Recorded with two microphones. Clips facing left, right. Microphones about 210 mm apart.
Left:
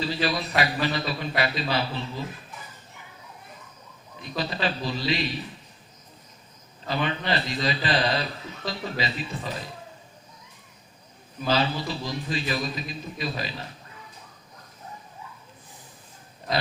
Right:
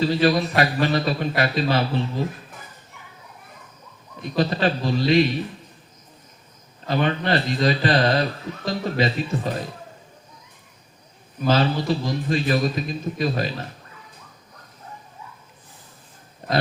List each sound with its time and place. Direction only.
0.0 s speech: 45° right (ahead or behind)
4.2 s speech: 45° right (ahead or behind)
6.9 s speech: 45° right (ahead or behind)
11.4 s speech: 45° right (ahead or behind)